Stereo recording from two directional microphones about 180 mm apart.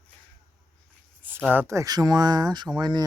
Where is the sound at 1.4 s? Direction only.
15° right (ahead or behind).